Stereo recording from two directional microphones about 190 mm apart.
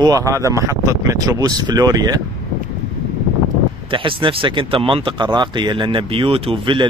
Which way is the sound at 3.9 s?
25° right (ahead or behind).